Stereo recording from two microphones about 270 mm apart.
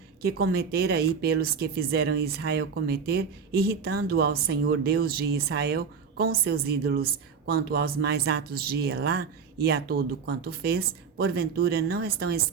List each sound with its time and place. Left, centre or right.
0.2 s speech: right